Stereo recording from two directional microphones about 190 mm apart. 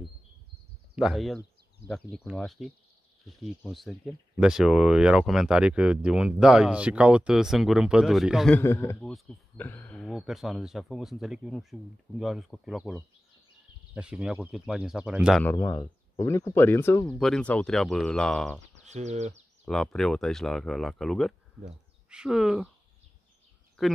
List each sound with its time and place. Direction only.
0.9 s speech: centre (ahead or behind)
8.5 s speech: 15° left (ahead or behind)
10.0 s speech: centre (ahead or behind)
15.4 s speech: 15° left (ahead or behind)
17.2 s speech: 5° left (ahead or behind)
18.8 s speech: 35° right (ahead or behind)
19.6 s speech: 5° left (ahead or behind)